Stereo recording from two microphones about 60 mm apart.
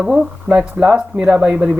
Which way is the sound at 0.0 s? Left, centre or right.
Centre.